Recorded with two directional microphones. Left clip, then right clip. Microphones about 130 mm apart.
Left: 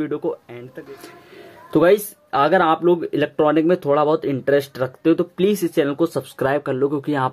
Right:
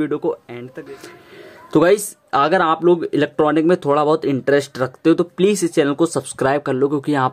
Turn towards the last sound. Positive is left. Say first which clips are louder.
# right 3 dB
turn(degrees=-25)  # may be behind; listen again after turning